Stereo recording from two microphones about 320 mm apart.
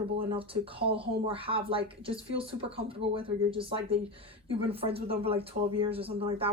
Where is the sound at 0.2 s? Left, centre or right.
Centre.